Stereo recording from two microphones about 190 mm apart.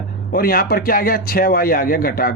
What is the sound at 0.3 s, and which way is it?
A man's voice, 50° left (ahead or behind).